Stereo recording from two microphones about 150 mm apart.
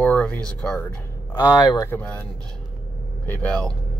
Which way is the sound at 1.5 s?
25° left (ahead or behind).